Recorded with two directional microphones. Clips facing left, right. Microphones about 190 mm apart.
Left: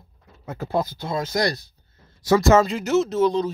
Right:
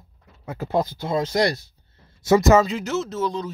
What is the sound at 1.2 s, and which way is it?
Speech, 30° right (ahead or behind).